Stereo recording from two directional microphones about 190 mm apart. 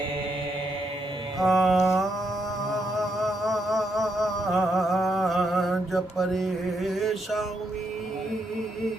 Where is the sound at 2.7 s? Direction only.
Centre (ahead or behind).